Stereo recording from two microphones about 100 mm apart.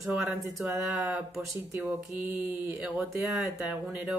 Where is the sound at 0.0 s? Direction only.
Centre (ahead or behind).